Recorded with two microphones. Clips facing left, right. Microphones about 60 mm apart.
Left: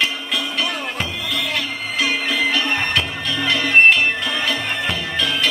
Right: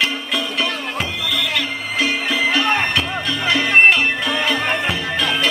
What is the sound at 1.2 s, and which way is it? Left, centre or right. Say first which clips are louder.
Music: right 2 dB; right.